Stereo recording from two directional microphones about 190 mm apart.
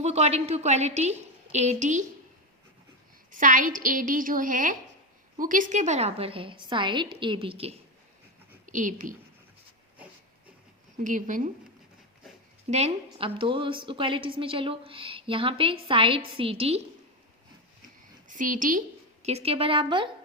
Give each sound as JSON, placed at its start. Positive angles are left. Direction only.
{"t": 0.0, "sound": "a woman's voice", "side_deg": -35}
{"t": 3.3, "sound": "a woman's voice", "side_deg": -45}
{"t": 8.6, "sound": "a woman's voice", "side_deg": -40}
{"t": 11.0, "sound": "a woman's voice", "side_deg": -40}
{"t": 12.6, "sound": "a woman's voice", "side_deg": -35}
{"t": 18.3, "sound": "a woman's voice", "side_deg": -45}
{"t": 19.2, "sound": "a woman's voice", "side_deg": -35}